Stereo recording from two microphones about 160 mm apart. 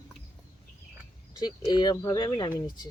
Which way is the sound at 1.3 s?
25° left (ahead or behind).